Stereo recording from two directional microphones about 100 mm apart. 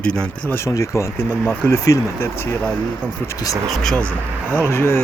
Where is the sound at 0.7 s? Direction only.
30° left (ahead or behind).